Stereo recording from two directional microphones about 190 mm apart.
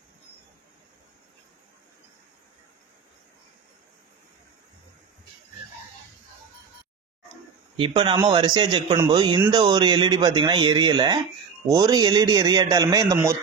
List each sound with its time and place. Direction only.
7.7 s speech: 25° right (ahead or behind)